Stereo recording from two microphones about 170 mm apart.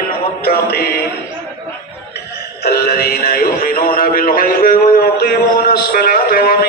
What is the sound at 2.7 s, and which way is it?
Music, 65° left (ahead or behind).